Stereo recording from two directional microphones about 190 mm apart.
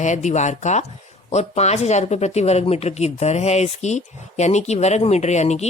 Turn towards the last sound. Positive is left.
turn(degrees=35)  # may be behind; listen again after turning